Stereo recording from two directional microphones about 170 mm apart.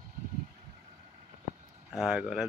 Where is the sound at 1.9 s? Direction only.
Centre (ahead or behind).